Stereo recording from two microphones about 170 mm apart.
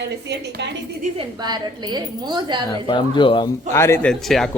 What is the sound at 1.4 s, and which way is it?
A woman's voice, 25° right (ahead or behind).